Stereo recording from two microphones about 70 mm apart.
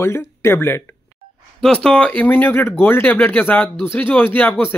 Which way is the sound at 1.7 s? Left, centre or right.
Centre.